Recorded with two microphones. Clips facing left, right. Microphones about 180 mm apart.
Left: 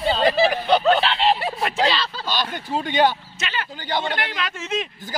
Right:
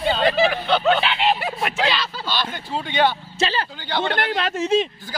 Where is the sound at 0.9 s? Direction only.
Centre (ahead or behind).